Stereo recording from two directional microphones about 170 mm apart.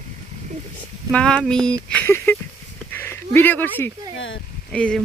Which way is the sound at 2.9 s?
15° left (ahead or behind).